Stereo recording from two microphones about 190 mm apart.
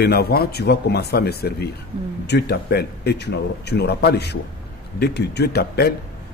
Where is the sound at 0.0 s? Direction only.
55° left (ahead or behind).